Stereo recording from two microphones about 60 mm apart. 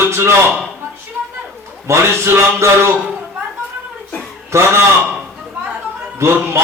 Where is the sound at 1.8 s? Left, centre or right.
Right.